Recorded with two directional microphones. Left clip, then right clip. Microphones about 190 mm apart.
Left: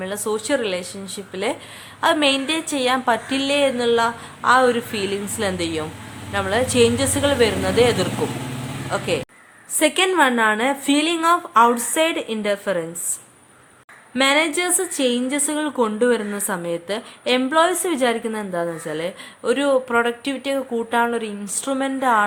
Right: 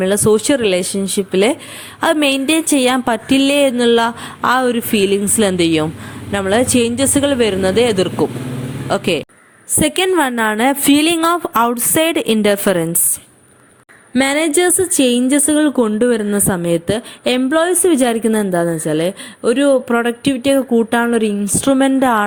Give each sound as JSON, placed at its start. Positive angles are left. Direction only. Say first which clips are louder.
{"t": 0.0, "sound": "a woman's voice", "louder": "right 11 dB", "side_deg": -40}
{"t": 14.1, "sound": "a woman's voice", "louder": "right 3 dB", "side_deg": -35}